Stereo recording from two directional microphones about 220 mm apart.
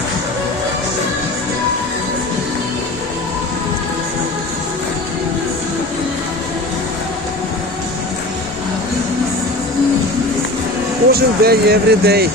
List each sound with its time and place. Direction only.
11.1 s speech: 45° right (ahead or behind)